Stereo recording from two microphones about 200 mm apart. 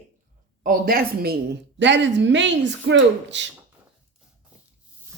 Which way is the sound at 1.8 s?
65° right (ahead or behind).